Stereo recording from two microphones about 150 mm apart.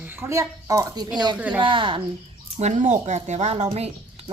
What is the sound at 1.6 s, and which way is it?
Speech, 35° right (ahead or behind).